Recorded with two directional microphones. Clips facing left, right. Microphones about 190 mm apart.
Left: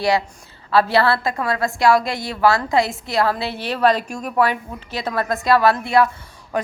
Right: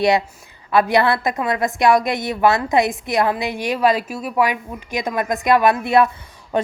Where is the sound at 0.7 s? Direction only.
15° right (ahead or behind).